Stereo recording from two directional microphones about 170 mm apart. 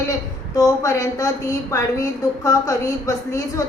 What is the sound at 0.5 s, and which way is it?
A woman's voice, 20° left (ahead or behind).